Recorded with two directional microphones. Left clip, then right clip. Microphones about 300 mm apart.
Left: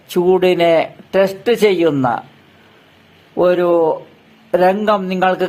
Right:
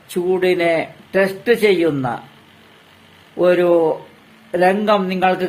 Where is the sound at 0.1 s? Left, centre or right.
Centre.